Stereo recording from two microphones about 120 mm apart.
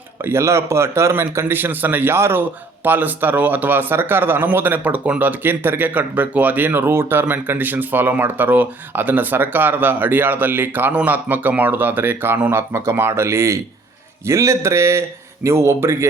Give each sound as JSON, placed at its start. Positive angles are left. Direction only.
{"t": 0.3, "sound": "a man's voice", "side_deg": -20}